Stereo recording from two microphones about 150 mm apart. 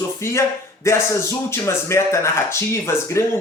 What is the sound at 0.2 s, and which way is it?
A man's voice, 20° left (ahead or behind).